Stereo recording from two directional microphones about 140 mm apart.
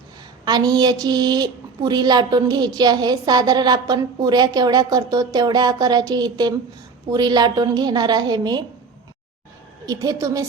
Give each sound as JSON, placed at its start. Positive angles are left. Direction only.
{"t": 0.4, "sound": "a woman's voice", "side_deg": -30}
{"t": 9.8, "sound": "a woman's voice", "side_deg": -25}